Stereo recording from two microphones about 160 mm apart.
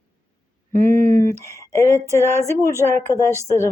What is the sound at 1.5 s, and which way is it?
Speech, 20° left (ahead or behind).